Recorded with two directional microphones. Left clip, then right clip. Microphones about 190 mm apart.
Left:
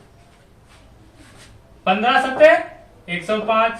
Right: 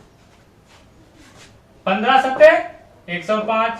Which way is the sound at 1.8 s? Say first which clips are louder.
Right 1 dB; 5° right (ahead or behind).